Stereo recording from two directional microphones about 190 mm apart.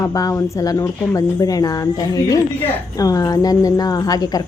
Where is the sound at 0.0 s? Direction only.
20° left (ahead or behind).